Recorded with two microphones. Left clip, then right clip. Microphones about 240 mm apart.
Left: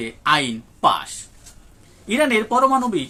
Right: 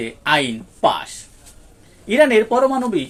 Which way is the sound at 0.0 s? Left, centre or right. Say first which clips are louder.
Right 1 dB; centre.